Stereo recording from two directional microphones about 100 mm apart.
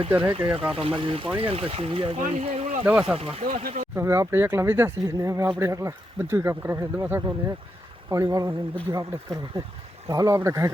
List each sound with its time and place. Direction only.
0.1 s speech: 15° right (ahead or behind)
0.7 s speech: 70° right (ahead or behind)
1.4 s speech: 70° right (ahead or behind)
2.8 s speech: 5° right (ahead or behind)
3.2 s speech: 85° right
3.9 s speech: 30° right (ahead or behind)
8.1 s speech: 35° right (ahead or behind)